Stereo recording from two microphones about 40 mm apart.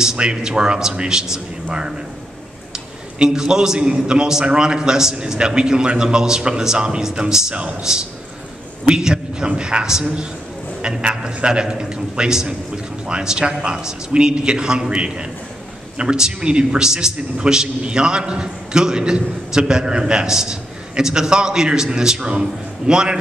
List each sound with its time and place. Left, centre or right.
0.0 s a man's voice: centre
7.1 s music: centre
7.5 s a man's voice: right